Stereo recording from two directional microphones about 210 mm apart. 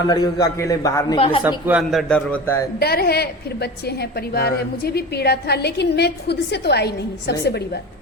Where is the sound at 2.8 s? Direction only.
50° left (ahead or behind).